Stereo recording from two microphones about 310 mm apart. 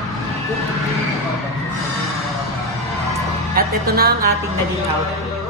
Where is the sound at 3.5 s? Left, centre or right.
Right.